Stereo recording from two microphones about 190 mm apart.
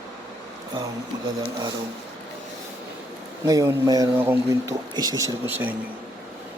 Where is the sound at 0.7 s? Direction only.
25° right (ahead or behind).